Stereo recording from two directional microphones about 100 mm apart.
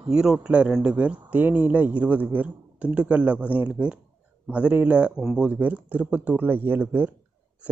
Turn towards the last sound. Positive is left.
turn(degrees=-20)  # may be behind; listen again after turning